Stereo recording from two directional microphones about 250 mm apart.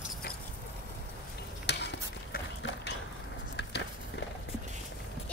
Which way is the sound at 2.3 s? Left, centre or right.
Left.